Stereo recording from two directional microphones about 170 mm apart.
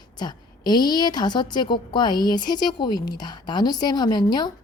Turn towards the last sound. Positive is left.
turn(degrees=25)  # may be behind; listen again after turning